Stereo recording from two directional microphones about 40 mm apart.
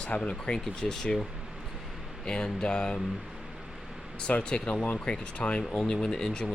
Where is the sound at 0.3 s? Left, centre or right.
Left.